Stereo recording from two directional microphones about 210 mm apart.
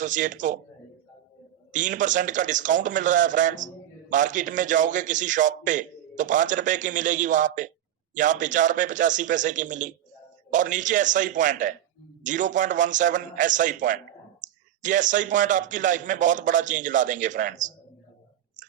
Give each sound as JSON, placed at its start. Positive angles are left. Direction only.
{"t": 0.0, "sound": "a man's voice", "side_deg": -35}
{"t": 1.7, "sound": "a man's voice", "side_deg": -40}